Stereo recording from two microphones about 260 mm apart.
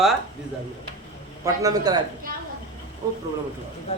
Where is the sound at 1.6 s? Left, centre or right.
Centre.